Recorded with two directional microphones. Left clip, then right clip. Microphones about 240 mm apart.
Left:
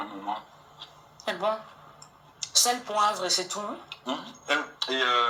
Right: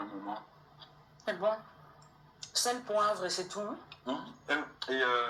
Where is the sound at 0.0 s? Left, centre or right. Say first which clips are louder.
Left 7 dB; centre.